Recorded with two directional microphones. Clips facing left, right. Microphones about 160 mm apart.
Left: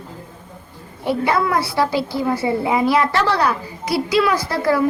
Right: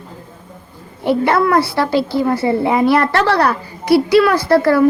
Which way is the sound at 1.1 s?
60° right (ahead or behind).